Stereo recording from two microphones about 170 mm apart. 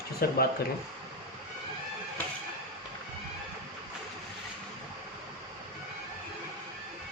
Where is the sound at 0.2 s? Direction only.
65° left (ahead or behind).